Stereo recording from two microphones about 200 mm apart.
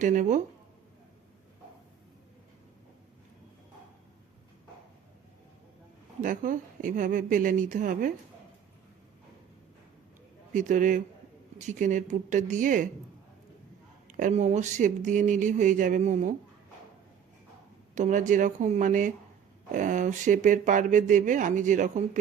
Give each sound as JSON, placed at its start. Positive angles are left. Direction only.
{"t": 0.0, "sound": "speech", "side_deg": -40}
{"t": 6.2, "sound": "speech", "side_deg": -40}
{"t": 10.5, "sound": "speech", "side_deg": -40}
{"t": 14.1, "sound": "speech", "side_deg": -40}
{"t": 17.9, "sound": "speech", "side_deg": -40}